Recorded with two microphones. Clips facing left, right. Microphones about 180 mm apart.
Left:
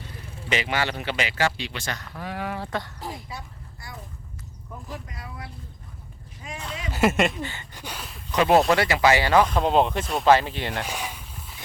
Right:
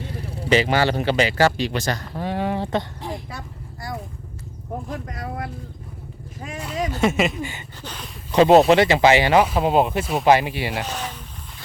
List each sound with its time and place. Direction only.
0.3 s speech: 35° right (ahead or behind)
3.0 s a sound: centre (ahead or behind)
4.7 s a sound: 55° right (ahead or behind)
5.1 s speech: 60° right (ahead or behind)
6.9 s speech: 5° left (ahead or behind)
7.8 s a sound: 10° left (ahead or behind)
8.3 s speech: 25° right (ahead or behind)
9.5 s speech: 5° right (ahead or behind)
10.8 s speech: 10° left (ahead or behind)